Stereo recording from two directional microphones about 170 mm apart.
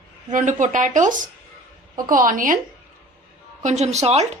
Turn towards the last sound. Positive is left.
turn(degrees=-40)  # may be behind; listen again after turning